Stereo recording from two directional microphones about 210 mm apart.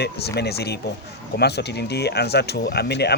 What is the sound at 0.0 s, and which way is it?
Speech, 50° left (ahead or behind).